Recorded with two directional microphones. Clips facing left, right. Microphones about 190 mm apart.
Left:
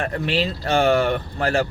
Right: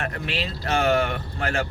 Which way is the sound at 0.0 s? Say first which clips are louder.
Left 6 dB; 35° left (ahead or behind).